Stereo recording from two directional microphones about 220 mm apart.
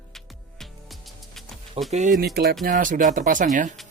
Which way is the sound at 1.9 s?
35° right (ahead or behind).